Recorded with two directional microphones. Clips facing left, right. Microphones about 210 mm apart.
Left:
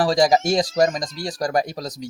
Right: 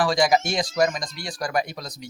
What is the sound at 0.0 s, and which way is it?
Speech, 40° left (ahead or behind).